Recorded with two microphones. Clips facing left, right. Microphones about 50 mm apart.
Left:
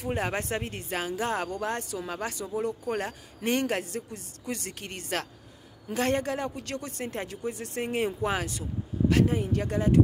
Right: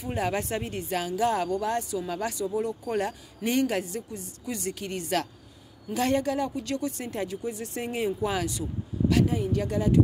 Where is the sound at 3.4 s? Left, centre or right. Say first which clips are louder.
Right 2 dB; left.